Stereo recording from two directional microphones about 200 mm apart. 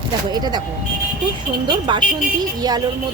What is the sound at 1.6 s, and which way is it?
Speech, 20° right (ahead or behind).